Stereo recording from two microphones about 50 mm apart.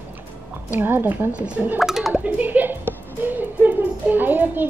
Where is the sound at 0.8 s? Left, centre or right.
Right.